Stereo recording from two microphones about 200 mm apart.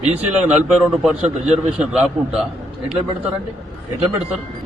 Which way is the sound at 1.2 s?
35° right (ahead or behind).